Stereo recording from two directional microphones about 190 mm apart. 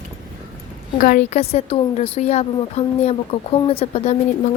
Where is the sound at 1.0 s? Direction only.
45° left (ahead or behind).